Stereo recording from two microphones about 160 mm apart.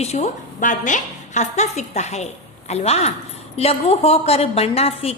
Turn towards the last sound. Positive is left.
turn(degrees=40)  # may be behind; listen again after turning